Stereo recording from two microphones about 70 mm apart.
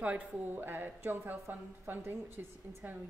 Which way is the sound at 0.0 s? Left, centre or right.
Right.